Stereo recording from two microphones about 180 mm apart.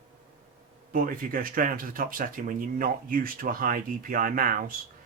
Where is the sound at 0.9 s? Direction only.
50° right (ahead or behind).